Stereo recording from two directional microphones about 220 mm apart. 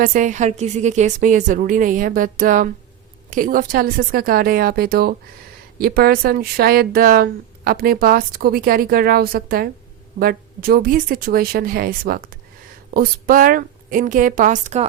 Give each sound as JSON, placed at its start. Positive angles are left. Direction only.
{"t": 0.0, "sound": "a woman's voice", "side_deg": -35}